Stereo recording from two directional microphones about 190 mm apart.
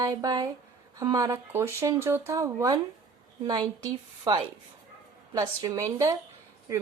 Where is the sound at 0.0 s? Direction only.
20° right (ahead or behind).